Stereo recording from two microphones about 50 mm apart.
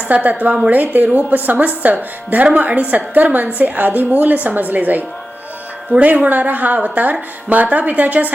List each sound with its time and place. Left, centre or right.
0.1 s a woman's voice: right
0.7 s speech: right